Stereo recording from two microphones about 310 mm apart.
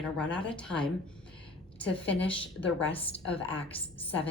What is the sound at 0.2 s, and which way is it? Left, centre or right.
Speech, centre.